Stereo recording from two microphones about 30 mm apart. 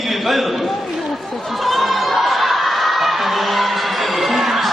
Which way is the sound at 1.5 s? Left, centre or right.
Centre.